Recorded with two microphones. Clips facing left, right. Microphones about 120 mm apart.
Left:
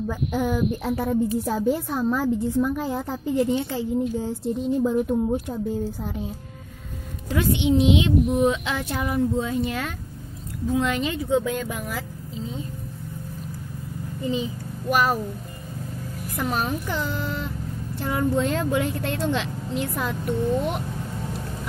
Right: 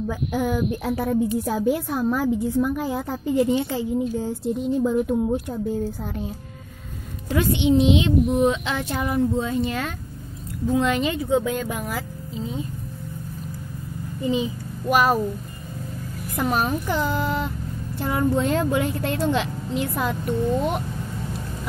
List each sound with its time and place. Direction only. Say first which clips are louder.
0.1 s a woman's voice: even; centre (ahead or behind)
7.3 s a woman's voice: right 2 dB; 5° left (ahead or behind)
14.2 s a child's voice: right 3 dB; 15° right (ahead or behind)
16.3 s a child's voice: right 3 dB; 40° right (ahead or behind)
17.1 s a sound: right 5 dB; 15° right (ahead or behind)
18.0 s a woman's voice: right 1 dB; 5° right (ahead or behind)